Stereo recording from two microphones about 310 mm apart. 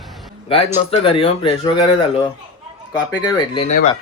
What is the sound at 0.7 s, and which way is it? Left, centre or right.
Speech, centre.